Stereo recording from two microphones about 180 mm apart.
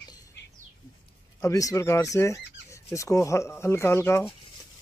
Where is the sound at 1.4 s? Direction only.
20° left (ahead or behind).